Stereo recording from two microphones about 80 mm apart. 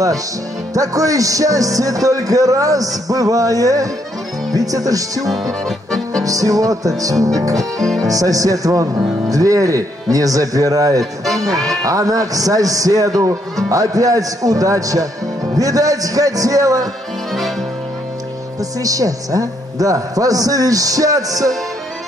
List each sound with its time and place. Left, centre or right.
0.7 s a man's voice: right
5.3 s music: centre
6.2 s a man's voice: right
11.5 s music: centre
11.8 s a man's voice: right
18.6 s a man's voice: right